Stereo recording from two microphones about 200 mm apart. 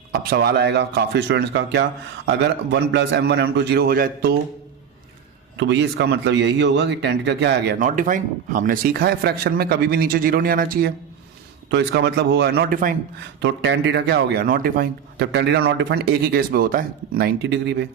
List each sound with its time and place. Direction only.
0.1 s a man's voice: 50° right (ahead or behind)
5.5 s a man's voice: 60° right (ahead or behind); by 13.0 s 45° right (ahead or behind)
13.4 s a man's voice: 60° right (ahead or behind)